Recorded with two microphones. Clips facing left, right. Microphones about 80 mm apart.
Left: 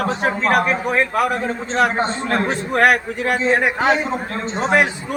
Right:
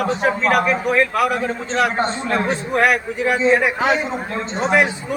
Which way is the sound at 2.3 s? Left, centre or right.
Left.